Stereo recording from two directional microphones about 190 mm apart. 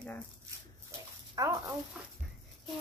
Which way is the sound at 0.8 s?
15° right (ahead or behind).